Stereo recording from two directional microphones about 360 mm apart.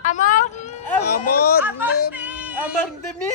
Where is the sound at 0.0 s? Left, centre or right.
Left.